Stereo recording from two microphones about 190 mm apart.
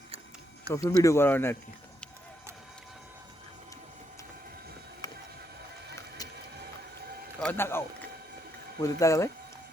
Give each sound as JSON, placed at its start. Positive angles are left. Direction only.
{"t": 0.7, "sound": "speech", "side_deg": 15}
{"t": 5.0, "sound": "a sound", "side_deg": 20}
{"t": 7.4, "sound": "a man's voice", "side_deg": 10}